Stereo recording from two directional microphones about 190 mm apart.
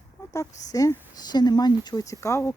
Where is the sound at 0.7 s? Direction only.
20° left (ahead or behind).